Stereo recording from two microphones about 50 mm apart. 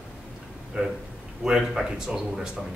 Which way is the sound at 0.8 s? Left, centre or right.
Centre.